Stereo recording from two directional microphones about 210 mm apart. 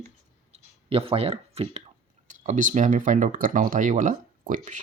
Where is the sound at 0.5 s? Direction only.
25° right (ahead or behind).